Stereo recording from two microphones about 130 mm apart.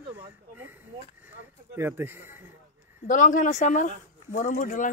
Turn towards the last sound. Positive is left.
turn(degrees=90)